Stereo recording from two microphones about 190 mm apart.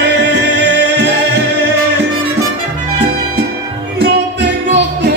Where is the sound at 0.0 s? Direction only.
65° right (ahead or behind).